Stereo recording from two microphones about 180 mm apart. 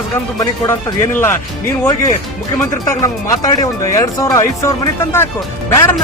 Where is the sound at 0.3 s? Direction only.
20° left (ahead or behind).